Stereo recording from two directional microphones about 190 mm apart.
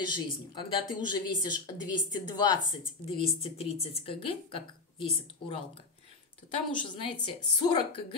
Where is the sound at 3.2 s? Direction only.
30° left (ahead or behind).